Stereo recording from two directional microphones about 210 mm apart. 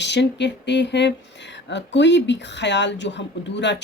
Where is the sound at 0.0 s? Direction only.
55° left (ahead or behind).